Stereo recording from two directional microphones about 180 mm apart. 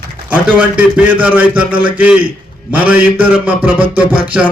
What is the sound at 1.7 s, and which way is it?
Speech, 30° right (ahead or behind).